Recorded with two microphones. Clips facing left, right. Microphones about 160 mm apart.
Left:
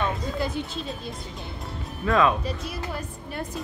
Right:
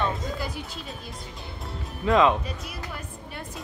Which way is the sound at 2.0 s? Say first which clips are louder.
Right 1 dB; 20° right (ahead or behind).